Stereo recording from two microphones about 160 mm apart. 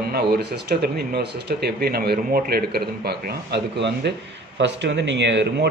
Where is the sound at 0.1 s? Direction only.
85° right.